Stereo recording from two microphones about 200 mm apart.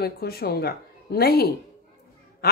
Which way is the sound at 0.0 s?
50° left (ahead or behind).